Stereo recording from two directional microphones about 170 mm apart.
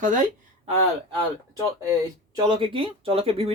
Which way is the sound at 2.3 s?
30° right (ahead or behind).